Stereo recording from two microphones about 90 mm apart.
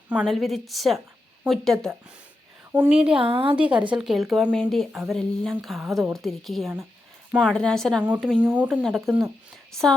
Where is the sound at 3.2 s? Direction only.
70° right (ahead or behind).